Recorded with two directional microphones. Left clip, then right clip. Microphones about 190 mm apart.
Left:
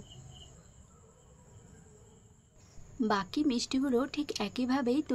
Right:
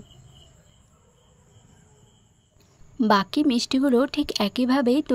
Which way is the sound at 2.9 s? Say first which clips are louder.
Right 10 dB; 50° right (ahead or behind).